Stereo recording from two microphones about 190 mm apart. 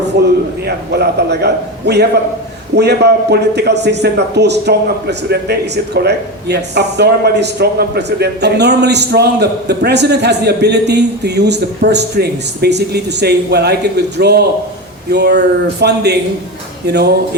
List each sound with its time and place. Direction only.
0.1 s a man's voice: 60° right (ahead or behind)